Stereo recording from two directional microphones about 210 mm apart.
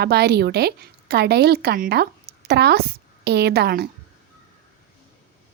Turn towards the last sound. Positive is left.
turn(degrees=-50)  # may be behind; listen again after turning